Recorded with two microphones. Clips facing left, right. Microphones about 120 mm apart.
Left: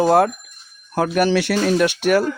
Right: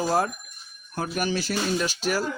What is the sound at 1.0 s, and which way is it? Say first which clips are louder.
Speech: left 10 dB; 90° left.